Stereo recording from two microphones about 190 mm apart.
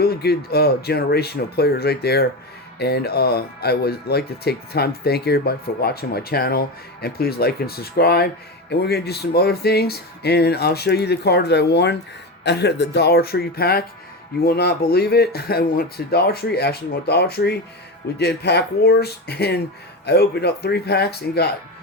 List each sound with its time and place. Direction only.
0.0 s speech: 55° left (ahead or behind)